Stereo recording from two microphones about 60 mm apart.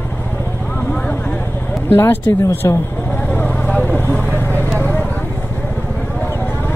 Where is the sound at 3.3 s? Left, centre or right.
Left.